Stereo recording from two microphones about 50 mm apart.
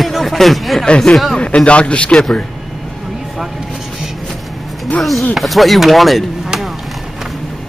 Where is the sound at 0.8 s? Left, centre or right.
Centre.